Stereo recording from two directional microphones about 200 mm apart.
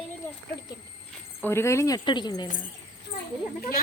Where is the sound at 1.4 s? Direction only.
15° left (ahead or behind).